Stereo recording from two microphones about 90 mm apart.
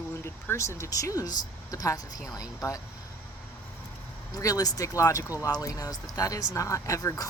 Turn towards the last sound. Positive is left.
turn(degrees=40)  # may be behind; listen again after turning